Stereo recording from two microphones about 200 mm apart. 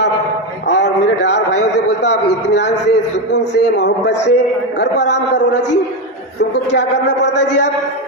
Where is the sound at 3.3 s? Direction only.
60° left (ahead or behind).